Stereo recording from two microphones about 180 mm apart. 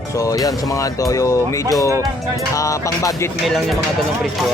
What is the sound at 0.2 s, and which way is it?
Speech, 20° left (ahead or behind).